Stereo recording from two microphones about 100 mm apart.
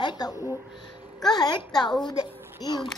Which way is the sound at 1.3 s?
45° left (ahead or behind).